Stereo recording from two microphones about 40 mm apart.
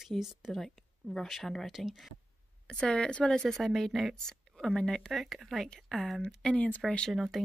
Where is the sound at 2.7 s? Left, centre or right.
Left.